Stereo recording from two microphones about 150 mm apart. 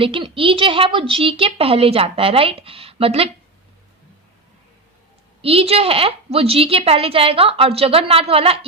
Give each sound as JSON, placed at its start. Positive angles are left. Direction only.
{"t": 0.0, "sound": "a woman's voice", "side_deg": -35}
{"t": 5.4, "sound": "a woman's voice", "side_deg": -40}